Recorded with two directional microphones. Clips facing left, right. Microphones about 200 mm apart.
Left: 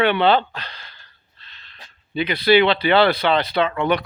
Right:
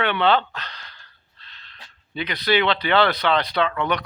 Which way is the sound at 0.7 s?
25° left (ahead or behind).